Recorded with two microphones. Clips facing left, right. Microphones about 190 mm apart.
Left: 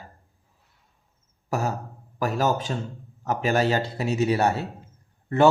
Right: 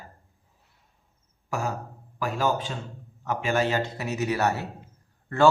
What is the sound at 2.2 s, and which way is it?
A man's voice, 40° left (ahead or behind).